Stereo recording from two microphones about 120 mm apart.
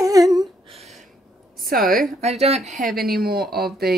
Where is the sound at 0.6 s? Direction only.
60° right (ahead or behind).